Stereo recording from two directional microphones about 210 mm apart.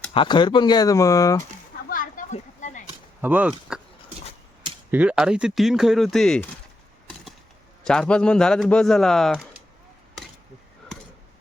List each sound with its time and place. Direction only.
0.1 s speech: 25° left (ahead or behind)
1.9 s a sound: 40° left (ahead or behind)
3.2 s speech: 10° right (ahead or behind)
4.9 s speech: 5° right (ahead or behind)
7.9 s speech: 5° left (ahead or behind)